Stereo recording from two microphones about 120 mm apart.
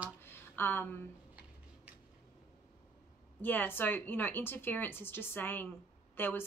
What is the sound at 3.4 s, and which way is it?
Speech, 15° left (ahead or behind).